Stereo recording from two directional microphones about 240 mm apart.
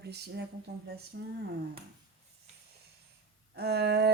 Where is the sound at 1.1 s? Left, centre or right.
Right.